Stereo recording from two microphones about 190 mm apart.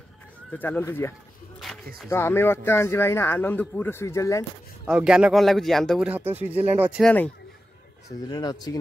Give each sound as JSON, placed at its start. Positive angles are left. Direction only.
{"t": 0.5, "sound": "speech", "side_deg": 10}
{"t": 4.8, "sound": "speech", "side_deg": -5}
{"t": 7.0, "sound": "speech", "side_deg": 5}
{"t": 8.3, "sound": "speech", "side_deg": 20}